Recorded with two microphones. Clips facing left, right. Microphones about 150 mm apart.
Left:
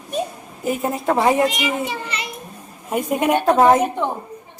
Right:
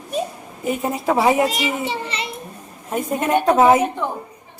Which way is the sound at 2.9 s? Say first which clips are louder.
Left 2 dB; 10° left (ahead or behind).